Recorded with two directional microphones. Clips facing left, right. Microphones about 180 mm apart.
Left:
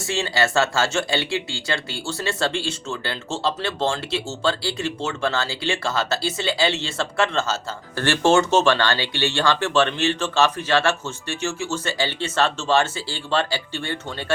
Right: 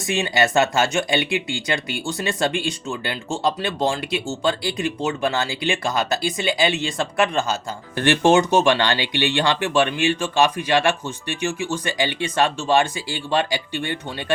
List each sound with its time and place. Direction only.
0.0 s speech: 15° right (ahead or behind)